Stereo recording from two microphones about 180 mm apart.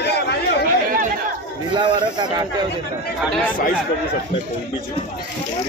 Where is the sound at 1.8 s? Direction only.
25° right (ahead or behind).